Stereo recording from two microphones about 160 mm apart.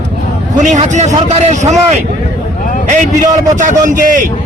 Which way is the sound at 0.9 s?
45° right (ahead or behind).